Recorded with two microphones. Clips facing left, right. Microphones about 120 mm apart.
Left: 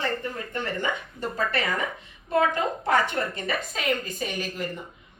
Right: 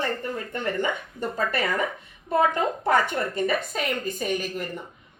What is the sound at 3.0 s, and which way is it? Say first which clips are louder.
A woman's voice: right 3 dB; 45° right (ahead or behind).